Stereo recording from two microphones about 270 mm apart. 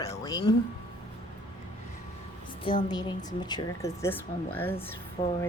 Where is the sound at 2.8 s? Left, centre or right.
Centre.